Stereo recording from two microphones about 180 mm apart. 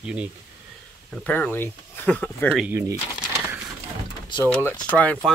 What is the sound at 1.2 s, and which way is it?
Speech, 10° left (ahead or behind).